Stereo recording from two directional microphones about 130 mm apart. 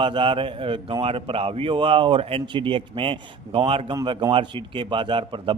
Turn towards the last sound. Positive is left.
turn(degrees=-40)  # may be behind; listen again after turning